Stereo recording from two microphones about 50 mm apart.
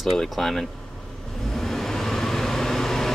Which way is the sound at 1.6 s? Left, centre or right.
Centre.